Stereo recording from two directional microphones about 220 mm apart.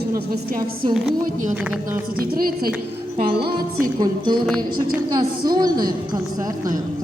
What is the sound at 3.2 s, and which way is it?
Music, 45° right (ahead or behind).